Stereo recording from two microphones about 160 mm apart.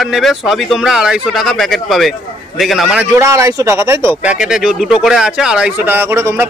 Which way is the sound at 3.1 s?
20° right (ahead or behind).